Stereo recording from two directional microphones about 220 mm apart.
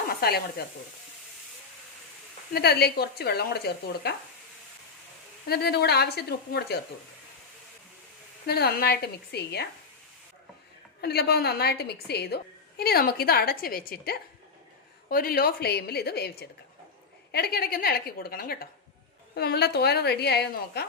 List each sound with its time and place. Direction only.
0.1 s sizzle: 45° left (ahead or behind)
2.5 s a woman's voice: 45° left (ahead or behind)
5.5 s a woman's voice: 45° left (ahead or behind)
8.4 s a woman's voice: 45° left (ahead or behind)
11.0 s a woman's voice: 45° left (ahead or behind)